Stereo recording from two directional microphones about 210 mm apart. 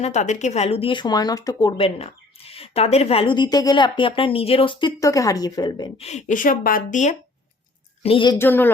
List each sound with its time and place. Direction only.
0.0 s speech: 35° left (ahead or behind); by 6.1 s 20° left (ahead or behind)
6.1 s a woman's voice: 35° left (ahead or behind)
8.0 s speech: 25° left (ahead or behind)
8.4 s speech: 10° left (ahead or behind)